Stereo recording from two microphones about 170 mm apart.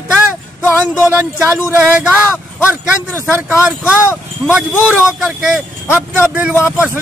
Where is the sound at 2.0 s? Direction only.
5° right (ahead or behind).